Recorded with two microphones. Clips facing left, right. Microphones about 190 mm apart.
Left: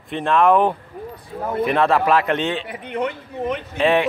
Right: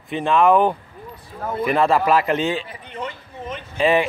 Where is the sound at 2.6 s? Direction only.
65° left (ahead or behind).